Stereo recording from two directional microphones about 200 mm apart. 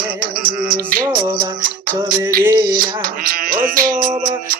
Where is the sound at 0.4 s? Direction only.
45° right (ahead or behind).